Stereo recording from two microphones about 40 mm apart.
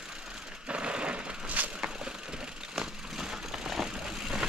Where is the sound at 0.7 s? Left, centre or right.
Right.